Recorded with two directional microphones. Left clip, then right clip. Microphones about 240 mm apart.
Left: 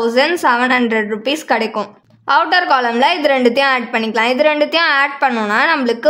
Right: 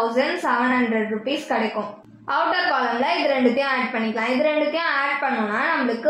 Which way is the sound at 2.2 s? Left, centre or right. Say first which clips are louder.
Left 8 dB; left.